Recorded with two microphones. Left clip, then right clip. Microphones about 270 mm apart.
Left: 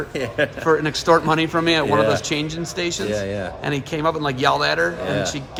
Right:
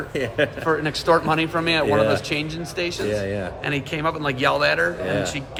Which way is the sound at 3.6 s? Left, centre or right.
Left.